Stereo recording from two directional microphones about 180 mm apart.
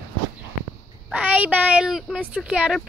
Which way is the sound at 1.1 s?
5° right (ahead or behind).